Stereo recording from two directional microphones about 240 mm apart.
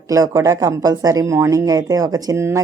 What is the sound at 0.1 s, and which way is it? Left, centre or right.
A woman's voice, centre.